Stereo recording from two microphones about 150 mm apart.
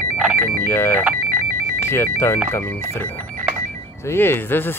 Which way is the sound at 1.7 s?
15° left (ahead or behind).